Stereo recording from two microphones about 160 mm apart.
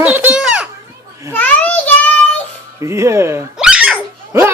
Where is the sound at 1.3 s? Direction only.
10° left (ahead or behind).